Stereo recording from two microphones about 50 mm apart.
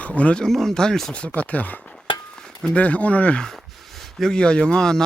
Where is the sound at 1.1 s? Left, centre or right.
Left.